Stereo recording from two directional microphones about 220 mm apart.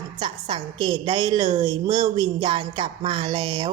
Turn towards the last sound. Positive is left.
turn(degrees=-20)  # may be behind; listen again after turning